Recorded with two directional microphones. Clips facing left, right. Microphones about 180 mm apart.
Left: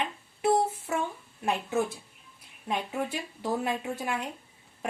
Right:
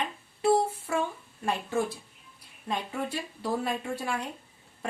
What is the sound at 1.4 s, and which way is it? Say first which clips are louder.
Speech: left 1 dB; 10° left (ahead or behind).